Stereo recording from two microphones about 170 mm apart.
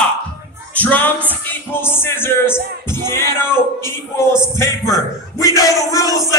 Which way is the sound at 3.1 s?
15° left (ahead or behind).